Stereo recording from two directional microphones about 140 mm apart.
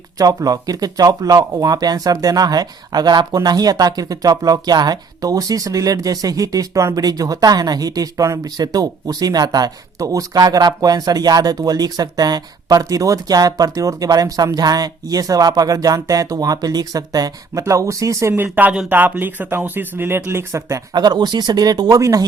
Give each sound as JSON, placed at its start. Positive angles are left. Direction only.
{"t": 0.2, "sound": "speech", "side_deg": -25}